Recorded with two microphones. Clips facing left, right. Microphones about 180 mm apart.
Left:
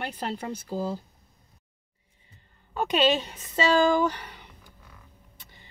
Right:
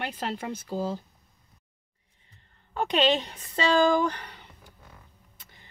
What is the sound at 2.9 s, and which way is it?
A woman's voice, 5° left (ahead or behind).